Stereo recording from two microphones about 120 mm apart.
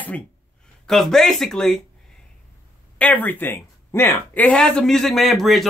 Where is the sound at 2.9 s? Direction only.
15° left (ahead or behind).